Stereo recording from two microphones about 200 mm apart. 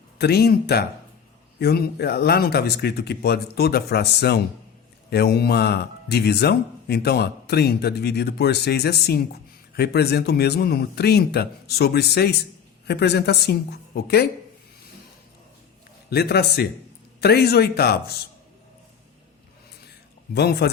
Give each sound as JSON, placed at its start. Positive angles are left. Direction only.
{"t": 0.2, "sound": "speech", "side_deg": 55}
{"t": 16.0, "sound": "speech", "side_deg": 55}
{"t": 20.3, "sound": "speech", "side_deg": 55}